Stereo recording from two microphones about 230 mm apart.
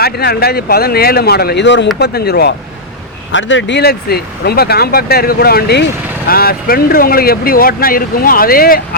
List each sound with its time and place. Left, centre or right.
0.0 s speech: left